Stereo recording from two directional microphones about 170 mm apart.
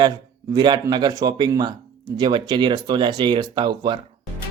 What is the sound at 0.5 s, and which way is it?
Speech, 25° right (ahead or behind).